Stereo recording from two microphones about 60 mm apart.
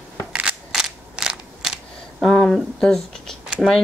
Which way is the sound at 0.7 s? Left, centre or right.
Centre.